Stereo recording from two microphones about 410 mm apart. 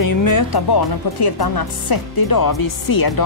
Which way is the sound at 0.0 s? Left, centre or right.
Left.